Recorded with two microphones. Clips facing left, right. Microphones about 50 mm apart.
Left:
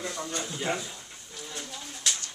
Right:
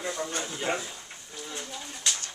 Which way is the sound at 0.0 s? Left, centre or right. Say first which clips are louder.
Right 2 dB; centre.